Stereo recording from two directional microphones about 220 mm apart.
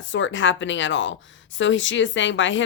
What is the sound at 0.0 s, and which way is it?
A woman's voice, 60° left (ahead or behind).